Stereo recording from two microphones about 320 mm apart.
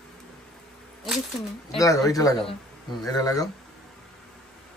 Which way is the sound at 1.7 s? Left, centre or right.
Centre.